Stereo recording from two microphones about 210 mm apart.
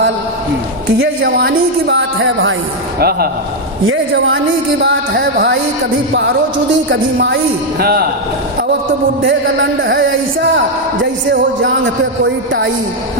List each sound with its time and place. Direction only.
0.9 s a man's voice: 50° right (ahead or behind); by 2.6 s 70° right (ahead or behind)
3.0 s a man's voice: 50° right (ahead or behind)
3.8 s a woman's voice: 70° right (ahead or behind)
4.8 s a man's voice: 55° right (ahead or behind)
7.8 s a man's voice: 45° right (ahead or behind)
9.2 s a man's voice: 60° right (ahead or behind)